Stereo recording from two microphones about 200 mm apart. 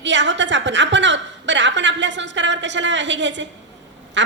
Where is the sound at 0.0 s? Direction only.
65° right (ahead or behind).